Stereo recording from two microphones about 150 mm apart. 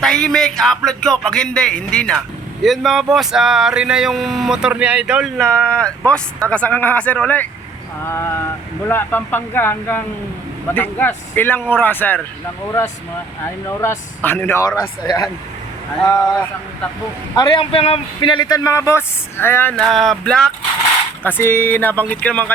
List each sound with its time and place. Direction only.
0.0 s speech: 5° left (ahead or behind)
5.4 s speech: 5° left (ahead or behind)
13.7 s speech: 15° left (ahead or behind)
17.3 s speech: 30° left (ahead or behind)
19.7 s speech: centre (ahead or behind)
21.2 s speech: 15° left (ahead or behind)